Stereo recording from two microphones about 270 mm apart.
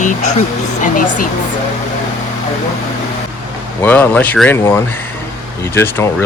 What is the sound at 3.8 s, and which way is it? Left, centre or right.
Speech, centre.